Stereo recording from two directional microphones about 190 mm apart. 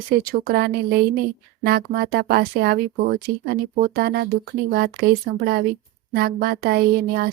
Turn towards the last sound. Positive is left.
turn(degrees=-55)  # may be behind; listen again after turning